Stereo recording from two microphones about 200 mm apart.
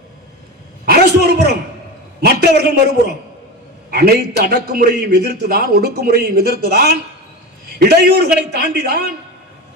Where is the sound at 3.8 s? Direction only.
50° right (ahead or behind).